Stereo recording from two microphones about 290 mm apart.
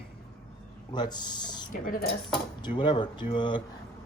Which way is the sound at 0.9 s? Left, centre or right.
Centre.